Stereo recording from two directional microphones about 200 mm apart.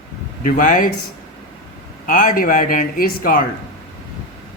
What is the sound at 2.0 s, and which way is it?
A man's voice, 45° left (ahead or behind).